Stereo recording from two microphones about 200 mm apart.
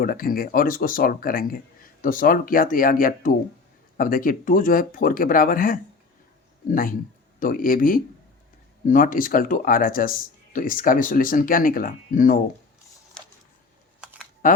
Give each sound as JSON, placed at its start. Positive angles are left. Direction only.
{"t": 0.0, "sound": "speech", "side_deg": 45}
{"t": 13.2, "sound": "a sound", "side_deg": 5}
{"t": 14.4, "sound": "speech", "side_deg": 40}